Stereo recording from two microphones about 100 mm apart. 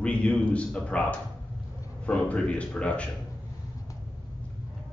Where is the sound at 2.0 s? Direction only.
15° left (ahead or behind).